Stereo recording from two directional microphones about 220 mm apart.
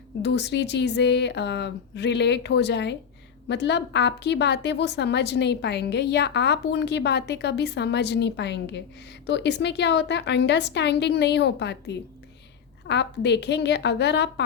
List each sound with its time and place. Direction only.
0.2 s a woman's voice: 50° left (ahead or behind)